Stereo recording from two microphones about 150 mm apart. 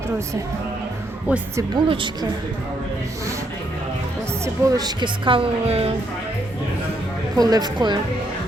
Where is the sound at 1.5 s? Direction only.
25° right (ahead or behind).